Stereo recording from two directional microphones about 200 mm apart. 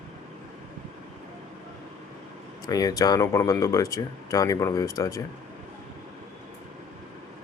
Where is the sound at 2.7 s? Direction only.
20° left (ahead or behind).